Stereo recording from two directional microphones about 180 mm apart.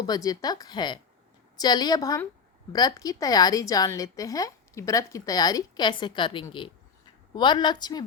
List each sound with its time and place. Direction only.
0.0 s a woman's voice: 20° left (ahead or behind)